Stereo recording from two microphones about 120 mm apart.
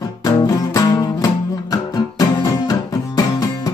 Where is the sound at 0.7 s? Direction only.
30° left (ahead or behind).